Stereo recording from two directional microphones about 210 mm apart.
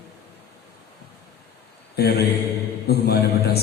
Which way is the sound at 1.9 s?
50° left (ahead or behind).